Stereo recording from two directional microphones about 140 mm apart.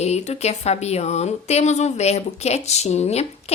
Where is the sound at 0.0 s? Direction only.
50° left (ahead or behind).